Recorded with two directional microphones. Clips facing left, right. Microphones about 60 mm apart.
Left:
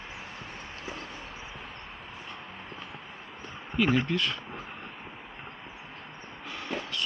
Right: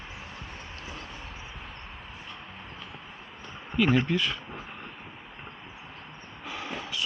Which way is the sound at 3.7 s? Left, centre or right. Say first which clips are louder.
Right 2 dB; centre.